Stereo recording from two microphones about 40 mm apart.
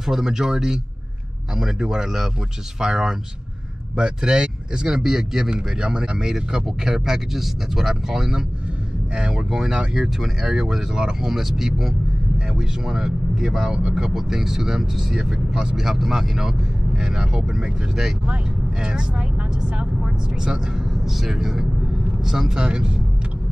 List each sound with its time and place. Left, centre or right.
0.0 s speech: centre
5.8 s speech: right
21.0 s speech: centre